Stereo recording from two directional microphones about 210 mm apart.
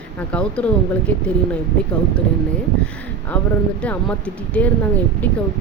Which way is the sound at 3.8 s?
5° left (ahead or behind).